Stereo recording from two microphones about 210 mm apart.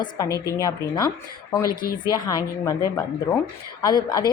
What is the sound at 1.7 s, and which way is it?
Speech, 45° left (ahead or behind).